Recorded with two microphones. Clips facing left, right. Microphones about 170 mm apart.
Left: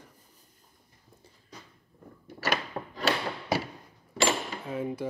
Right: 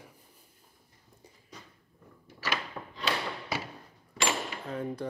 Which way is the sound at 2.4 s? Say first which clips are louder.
Left 4 dB; 50° left (ahead or behind).